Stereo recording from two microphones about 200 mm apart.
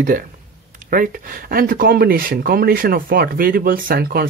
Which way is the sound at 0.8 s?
45° right (ahead or behind).